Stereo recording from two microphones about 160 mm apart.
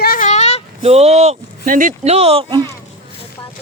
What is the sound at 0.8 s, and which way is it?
Speech, 40° right (ahead or behind).